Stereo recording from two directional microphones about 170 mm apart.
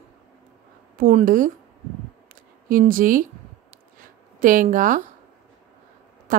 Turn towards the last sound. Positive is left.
turn(degrees=-50)  # may be behind; listen again after turning